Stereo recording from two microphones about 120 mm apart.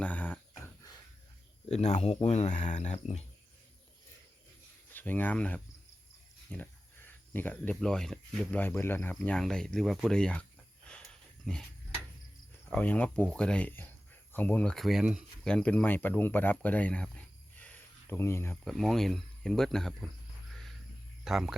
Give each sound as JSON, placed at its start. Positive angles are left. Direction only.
{"t": 0.0, "sound": "speech", "side_deg": 15}
{"t": 1.6, "sound": "speech", "side_deg": 65}
{"t": 4.9, "sound": "speech", "side_deg": 15}
{"t": 11.5, "sound": "speech", "side_deg": 5}
{"t": 12.6, "sound": "speech", "side_deg": 15}
{"t": 15.4, "sound": "speech", "side_deg": 10}
{"t": 18.5, "sound": "speech", "side_deg": 5}
{"t": 20.5, "sound": "a sound", "side_deg": 0}
{"t": 21.2, "sound": "speech", "side_deg": -5}